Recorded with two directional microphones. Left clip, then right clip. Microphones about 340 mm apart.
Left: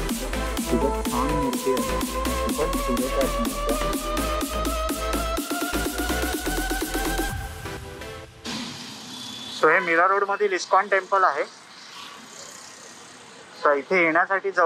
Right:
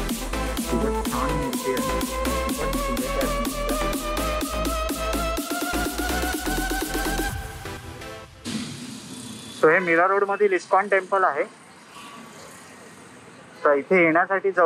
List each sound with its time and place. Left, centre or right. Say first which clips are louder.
0.0 s music: even; centre
9.6 s speech: right 1 dB; centre
13.6 s speech: right 2 dB; centre